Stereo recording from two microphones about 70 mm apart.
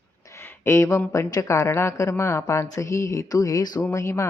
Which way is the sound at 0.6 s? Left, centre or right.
Left.